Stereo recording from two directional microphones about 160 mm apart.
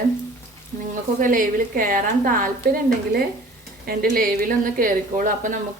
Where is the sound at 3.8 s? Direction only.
65° right (ahead or behind).